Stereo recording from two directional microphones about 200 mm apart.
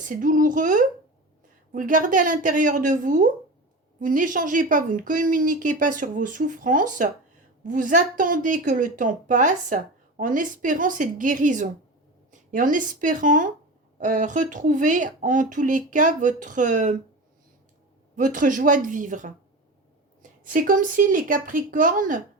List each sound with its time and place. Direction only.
0.0 s a woman's voice: 40° right (ahead or behind)
18.2 s a woman's voice: 40° right (ahead or behind)
20.4 s speech: 40° right (ahead or behind)